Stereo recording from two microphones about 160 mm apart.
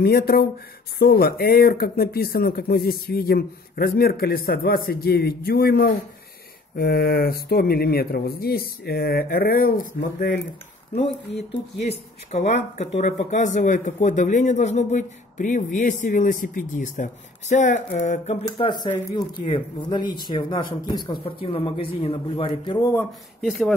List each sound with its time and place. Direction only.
0.0 s speech: 75° left (ahead or behind); by 10.3 s 55° left (ahead or behind)
11.9 s speech: 45° left (ahead or behind)
18.6 s a man's voice: 30° left (ahead or behind)